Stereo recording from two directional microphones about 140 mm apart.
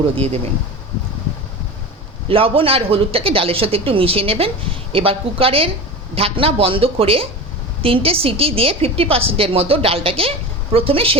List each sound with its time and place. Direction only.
2.2 s a woman's voice: 40° right (ahead or behind)